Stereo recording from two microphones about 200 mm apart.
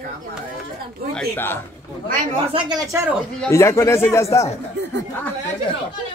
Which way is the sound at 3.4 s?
15° left (ahead or behind).